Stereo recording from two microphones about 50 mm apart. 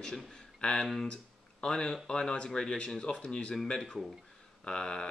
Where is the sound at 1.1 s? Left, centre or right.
Centre.